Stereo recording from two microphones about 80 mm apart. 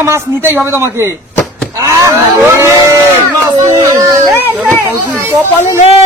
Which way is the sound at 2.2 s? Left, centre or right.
Right.